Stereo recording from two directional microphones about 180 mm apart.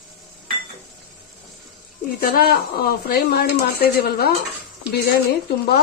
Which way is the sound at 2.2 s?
55° left (ahead or behind).